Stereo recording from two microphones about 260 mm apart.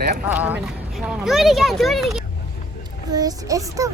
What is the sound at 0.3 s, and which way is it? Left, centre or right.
Speech, centre.